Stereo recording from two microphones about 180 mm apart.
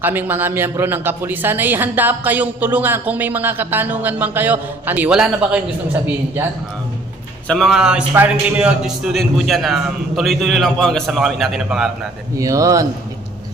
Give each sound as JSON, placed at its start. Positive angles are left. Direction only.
{"t": 0.0, "sound": "a man's voice", "side_deg": -10}
{"t": 7.4, "sound": "a man's voice", "side_deg": 0}
{"t": 12.4, "sound": "speech", "side_deg": -20}